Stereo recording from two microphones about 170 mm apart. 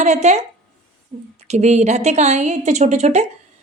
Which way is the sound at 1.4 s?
40° right (ahead or behind).